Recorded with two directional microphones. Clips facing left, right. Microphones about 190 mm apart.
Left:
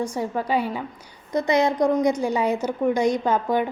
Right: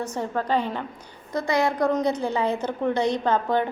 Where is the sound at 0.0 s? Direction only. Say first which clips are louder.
Left 2 dB; 10° left (ahead or behind).